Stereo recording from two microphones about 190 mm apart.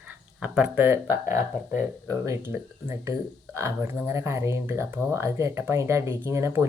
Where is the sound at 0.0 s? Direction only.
5° right (ahead or behind).